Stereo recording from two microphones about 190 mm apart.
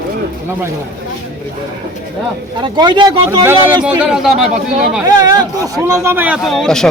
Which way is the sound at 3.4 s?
10° right (ahead or behind).